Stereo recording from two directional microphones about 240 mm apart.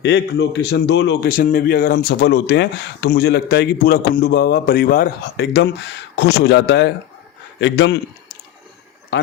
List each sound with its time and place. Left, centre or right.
0.0 s speech: left
9.1 s speech: left